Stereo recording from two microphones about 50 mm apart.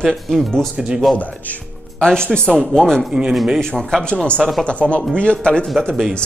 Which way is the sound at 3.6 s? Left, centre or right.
Centre.